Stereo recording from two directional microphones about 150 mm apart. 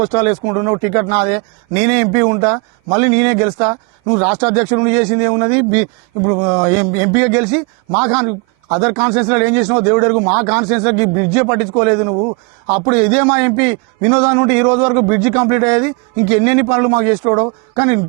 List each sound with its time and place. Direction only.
0.0 s a man's voice: 15° right (ahead or behind)